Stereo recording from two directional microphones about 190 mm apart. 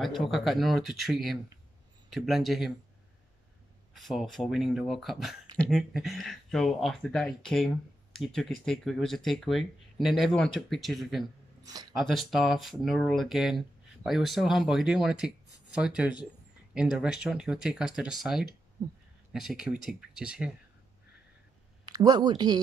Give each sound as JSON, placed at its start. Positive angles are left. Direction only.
{"t": 0.0, "sound": "speech", "side_deg": 0}
{"t": 3.9, "sound": "speech", "side_deg": 0}
{"t": 11.6, "sound": "a sound", "side_deg": -20}
{"t": 12.0, "sound": "speech", "side_deg": 0}
{"t": 18.8, "sound": "speech", "side_deg": -20}
{"t": 19.3, "sound": "speech", "side_deg": -5}
{"t": 21.8, "sound": "speech", "side_deg": -20}